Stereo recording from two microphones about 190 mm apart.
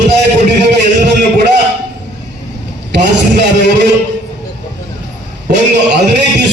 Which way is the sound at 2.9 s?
65° right (ahead or behind).